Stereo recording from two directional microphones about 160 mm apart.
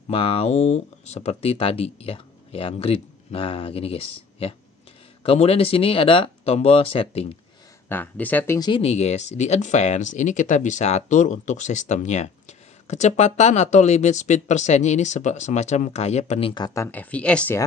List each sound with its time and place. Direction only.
0.1 s speech: 35° left (ahead or behind)
7.9 s speech: 10° left (ahead or behind)
8.5 s speech: 25° left (ahead or behind)
8.8 s speech: 40° left (ahead or behind); by 17.6 s 10° left (ahead or behind)